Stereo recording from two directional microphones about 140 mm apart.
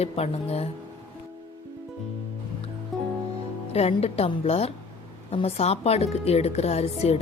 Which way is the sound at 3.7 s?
45° left (ahead or behind).